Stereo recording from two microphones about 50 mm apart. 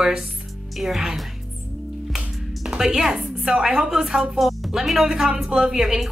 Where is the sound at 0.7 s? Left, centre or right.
Centre.